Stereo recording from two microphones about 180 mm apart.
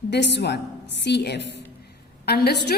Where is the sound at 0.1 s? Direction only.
75° left (ahead or behind).